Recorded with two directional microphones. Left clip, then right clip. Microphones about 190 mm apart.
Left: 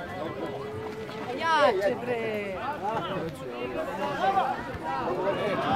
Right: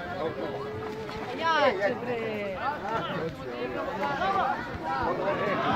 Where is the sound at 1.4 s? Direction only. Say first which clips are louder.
Left 1 dB; 40° left (ahead or behind).